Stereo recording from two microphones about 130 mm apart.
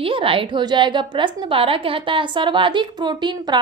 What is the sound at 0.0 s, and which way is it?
A woman's voice, 45° right (ahead or behind).